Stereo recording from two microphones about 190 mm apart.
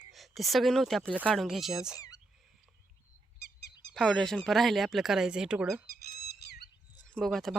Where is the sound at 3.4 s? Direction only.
60° left (ahead or behind).